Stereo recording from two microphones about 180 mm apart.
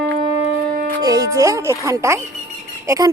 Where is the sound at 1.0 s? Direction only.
20° right (ahead or behind).